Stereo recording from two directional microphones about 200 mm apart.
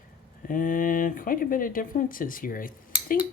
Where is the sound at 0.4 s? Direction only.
45° left (ahead or behind).